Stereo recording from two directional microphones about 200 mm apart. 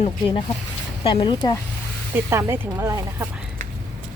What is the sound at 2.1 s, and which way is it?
Speech, 15° right (ahead or behind).